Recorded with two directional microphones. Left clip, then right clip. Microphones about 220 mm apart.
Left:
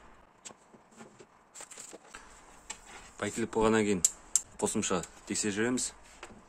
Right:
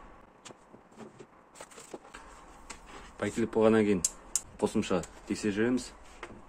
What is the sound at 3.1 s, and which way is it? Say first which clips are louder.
Speech: right 2 dB; 15° left (ahead or behind).